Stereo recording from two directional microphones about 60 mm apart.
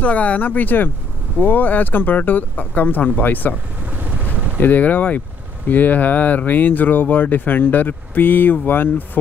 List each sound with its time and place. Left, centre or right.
0.0 s speech: left
4.6 s speech: left